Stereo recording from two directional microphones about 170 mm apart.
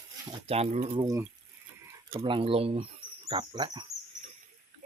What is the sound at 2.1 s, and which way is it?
Speech, 30° right (ahead or behind).